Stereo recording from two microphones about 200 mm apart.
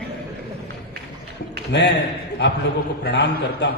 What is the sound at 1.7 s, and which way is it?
Speech, 60° left (ahead or behind).